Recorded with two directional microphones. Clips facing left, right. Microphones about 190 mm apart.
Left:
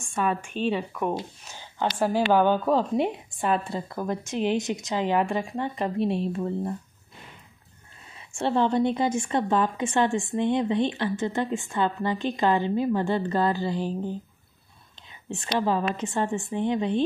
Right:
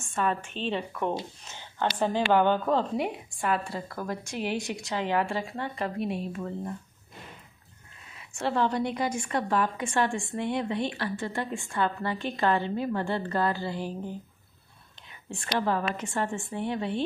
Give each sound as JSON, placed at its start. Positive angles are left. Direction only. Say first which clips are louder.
{"t": 0.0, "sound": "a woman's voice", "louder": "left 2 dB", "side_deg": 10}
{"t": 3.0, "sound": "a woman's voice", "louder": "left 4 dB", "side_deg": 25}
{"t": 8.2, "sound": "a woman's voice", "louder": "left 3 dB", "side_deg": 25}
{"t": 15.9, "sound": "a woman's voice", "louder": "left 4 dB", "side_deg": 20}